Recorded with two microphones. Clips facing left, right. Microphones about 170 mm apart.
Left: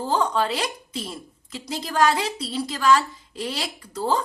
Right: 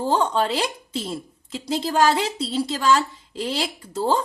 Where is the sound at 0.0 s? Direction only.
25° right (ahead or behind).